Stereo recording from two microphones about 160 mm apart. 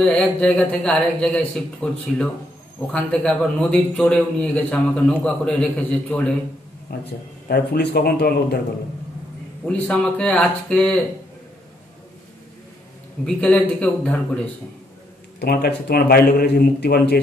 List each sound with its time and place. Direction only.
0.0 s a man's voice: 5° left (ahead or behind)
6.9 s a man's voice: 75° left (ahead or behind)
9.7 s a man's voice: 5° left (ahead or behind)
13.2 s a man's voice: 5° left (ahead or behind)
15.3 s a man's voice: 80° left